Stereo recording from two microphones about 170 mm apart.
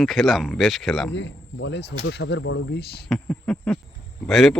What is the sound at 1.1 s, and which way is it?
Speech, 90° left.